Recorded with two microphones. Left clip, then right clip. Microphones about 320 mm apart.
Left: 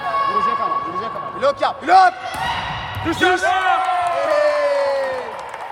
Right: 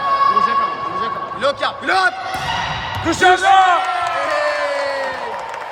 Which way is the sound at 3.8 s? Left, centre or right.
Centre.